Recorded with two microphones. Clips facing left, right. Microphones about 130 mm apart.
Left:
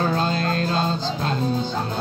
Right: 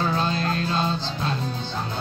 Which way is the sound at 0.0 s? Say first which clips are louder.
Left 2 dB; 45° left (ahead or behind).